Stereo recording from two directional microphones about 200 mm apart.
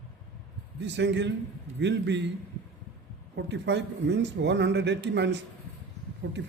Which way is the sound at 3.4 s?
60° right (ahead or behind).